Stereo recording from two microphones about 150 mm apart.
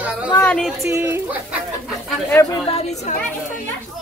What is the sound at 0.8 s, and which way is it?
Speech, 15° right (ahead or behind).